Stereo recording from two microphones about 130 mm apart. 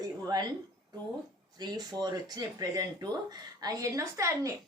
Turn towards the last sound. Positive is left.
turn(degrees=-25)  # may be behind; listen again after turning